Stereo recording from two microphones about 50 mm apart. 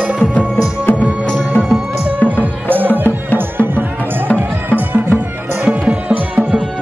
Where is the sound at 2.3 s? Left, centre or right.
Right.